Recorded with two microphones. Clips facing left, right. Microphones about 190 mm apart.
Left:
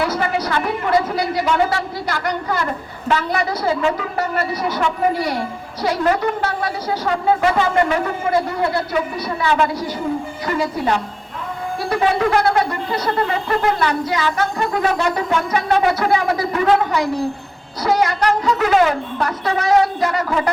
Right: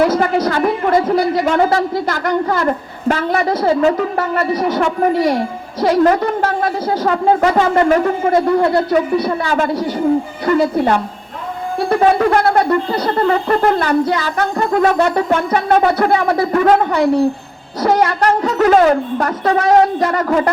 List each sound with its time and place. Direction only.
0.0 s speech: 50° right (ahead or behind)